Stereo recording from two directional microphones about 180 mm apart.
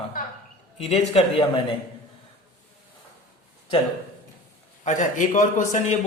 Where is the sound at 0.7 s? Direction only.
35° left (ahead or behind).